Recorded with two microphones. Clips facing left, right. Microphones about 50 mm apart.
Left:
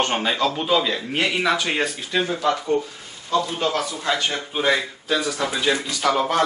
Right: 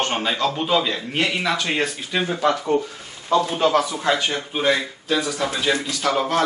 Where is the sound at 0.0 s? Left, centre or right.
Centre.